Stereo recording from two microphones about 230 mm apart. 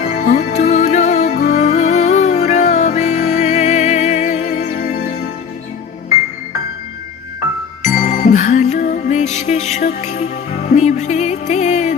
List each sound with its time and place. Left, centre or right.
0.0 s music: left
7.9 s music: left